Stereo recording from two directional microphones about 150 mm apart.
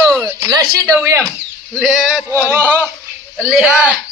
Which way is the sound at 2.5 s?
15° right (ahead or behind).